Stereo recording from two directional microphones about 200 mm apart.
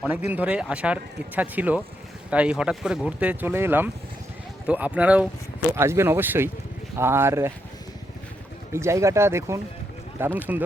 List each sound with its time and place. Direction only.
0.0 s speech: 10° right (ahead or behind)
8.7 s speech: 15° right (ahead or behind)